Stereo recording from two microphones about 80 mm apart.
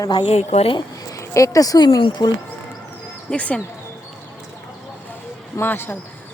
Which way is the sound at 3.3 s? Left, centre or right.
Centre.